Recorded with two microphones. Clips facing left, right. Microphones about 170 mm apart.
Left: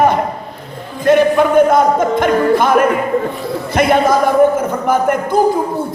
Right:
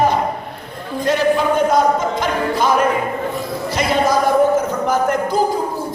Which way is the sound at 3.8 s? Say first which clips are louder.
Left 5 dB; 55° left (ahead or behind).